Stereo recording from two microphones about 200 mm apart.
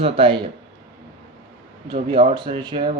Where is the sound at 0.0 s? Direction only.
25° right (ahead or behind).